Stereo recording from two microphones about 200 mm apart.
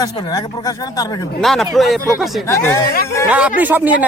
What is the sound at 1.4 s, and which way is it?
Speech, centre (ahead or behind).